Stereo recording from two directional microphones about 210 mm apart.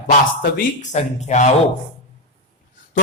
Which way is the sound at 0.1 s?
35° left (ahead or behind).